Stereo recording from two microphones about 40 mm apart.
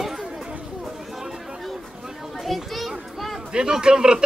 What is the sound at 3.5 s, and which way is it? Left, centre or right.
Speech, right.